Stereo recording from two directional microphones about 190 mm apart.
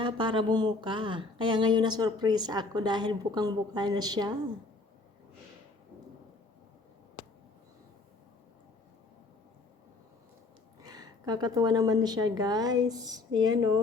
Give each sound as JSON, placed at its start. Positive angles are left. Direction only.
{"t": 0.0, "sound": "speech", "side_deg": -25}
{"t": 10.8, "sound": "speech", "side_deg": -20}